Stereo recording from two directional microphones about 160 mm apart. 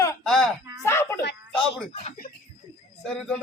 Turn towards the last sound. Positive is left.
turn(degrees=0)  # may be behind; listen again after turning